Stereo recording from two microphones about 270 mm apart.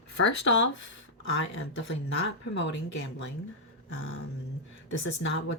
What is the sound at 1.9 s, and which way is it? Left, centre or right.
Speech, left.